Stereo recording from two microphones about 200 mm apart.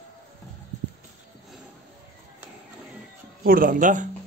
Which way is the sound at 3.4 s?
45° right (ahead or behind).